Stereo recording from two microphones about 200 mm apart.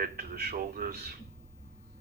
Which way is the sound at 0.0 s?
50° right (ahead or behind).